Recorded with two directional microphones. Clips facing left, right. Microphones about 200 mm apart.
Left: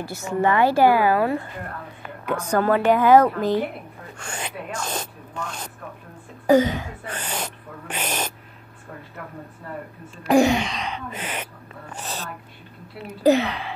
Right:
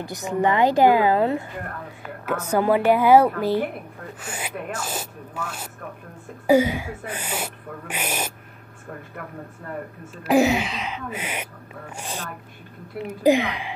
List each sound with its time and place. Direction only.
0.0 s speech: 15° right (ahead or behind)
2.2 s speech: 5° right (ahead or behind)
10.1 s speech: 5° right (ahead or behind)